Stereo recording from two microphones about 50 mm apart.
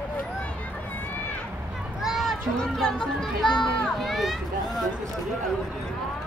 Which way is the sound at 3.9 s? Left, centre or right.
Centre.